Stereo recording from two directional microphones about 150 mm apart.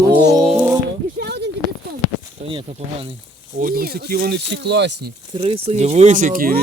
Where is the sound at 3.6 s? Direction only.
80° right.